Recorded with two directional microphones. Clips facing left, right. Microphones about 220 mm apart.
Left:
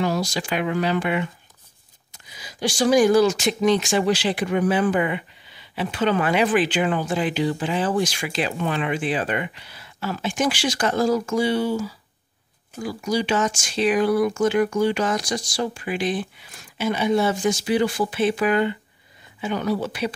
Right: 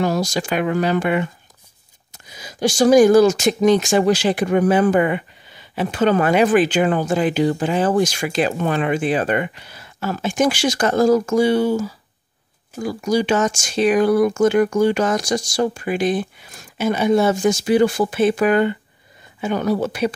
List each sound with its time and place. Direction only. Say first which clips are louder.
0.0 s speech: right 4 dB; 45° right (ahead or behind)